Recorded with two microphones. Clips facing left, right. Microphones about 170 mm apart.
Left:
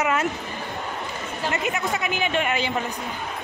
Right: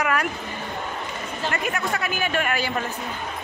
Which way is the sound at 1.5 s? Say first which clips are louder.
Left 1 dB; 20° left (ahead or behind).